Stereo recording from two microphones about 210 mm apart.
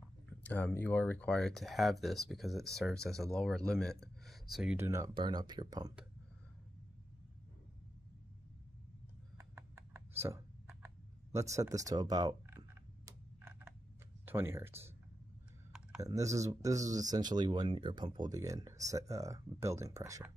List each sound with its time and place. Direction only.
0.5 s speech: 10° left (ahead or behind); by 5.9 s 20° right (ahead or behind)
9.4 s a sound: 15° right (ahead or behind)
11.3 s speech: 15° right (ahead or behind)
13.4 s typing: 10° right (ahead or behind)
14.2 s speech: 10° right (ahead or behind)
16.0 s speech: 15° right (ahead or behind)